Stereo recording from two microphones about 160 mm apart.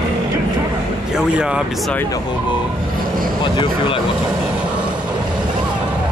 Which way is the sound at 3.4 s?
30° left (ahead or behind).